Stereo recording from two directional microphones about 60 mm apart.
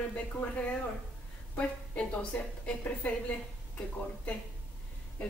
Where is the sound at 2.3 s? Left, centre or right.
Left.